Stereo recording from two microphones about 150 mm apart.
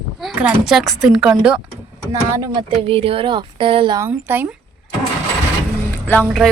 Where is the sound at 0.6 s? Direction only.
Centre (ahead or behind).